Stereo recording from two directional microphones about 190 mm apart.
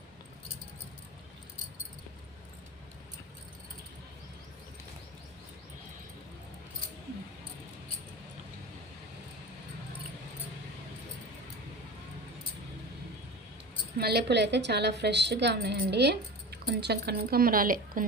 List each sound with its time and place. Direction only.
14.0 s a woman's voice: 60° right (ahead or behind)